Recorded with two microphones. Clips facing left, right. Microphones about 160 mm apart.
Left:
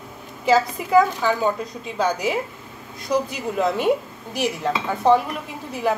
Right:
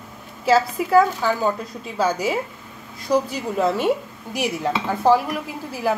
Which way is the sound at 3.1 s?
30° right (ahead or behind).